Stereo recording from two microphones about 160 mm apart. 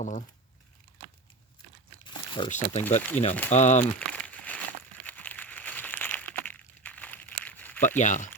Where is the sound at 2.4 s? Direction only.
50° left (ahead or behind).